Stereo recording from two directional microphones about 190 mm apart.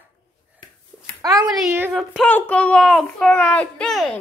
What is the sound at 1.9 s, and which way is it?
Speech, centre (ahead or behind).